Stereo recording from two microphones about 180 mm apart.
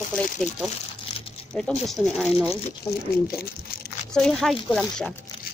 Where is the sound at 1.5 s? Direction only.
5° left (ahead or behind).